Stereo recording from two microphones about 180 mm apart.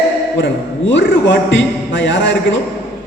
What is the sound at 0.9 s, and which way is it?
A man's voice, 90° left.